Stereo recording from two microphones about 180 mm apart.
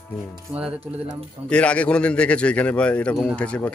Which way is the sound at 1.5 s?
5° left (ahead or behind).